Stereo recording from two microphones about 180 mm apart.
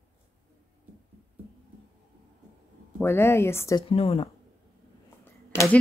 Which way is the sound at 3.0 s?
15° left (ahead or behind).